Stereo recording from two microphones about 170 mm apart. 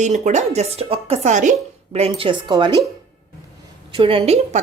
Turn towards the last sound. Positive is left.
turn(degrees=-40)  # may be behind; listen again after turning